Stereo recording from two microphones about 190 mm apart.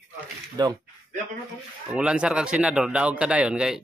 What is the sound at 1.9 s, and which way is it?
A man's voice, 5° right (ahead or behind).